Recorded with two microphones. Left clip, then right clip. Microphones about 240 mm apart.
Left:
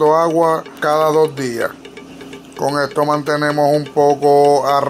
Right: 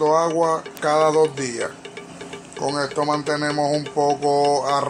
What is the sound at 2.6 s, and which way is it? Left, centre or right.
Speech, left.